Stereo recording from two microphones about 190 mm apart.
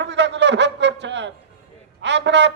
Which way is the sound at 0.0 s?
65° right (ahead or behind).